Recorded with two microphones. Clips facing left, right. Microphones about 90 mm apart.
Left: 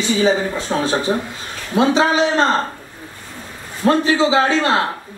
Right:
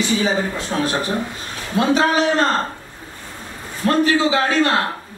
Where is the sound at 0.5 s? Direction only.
25° left (ahead or behind).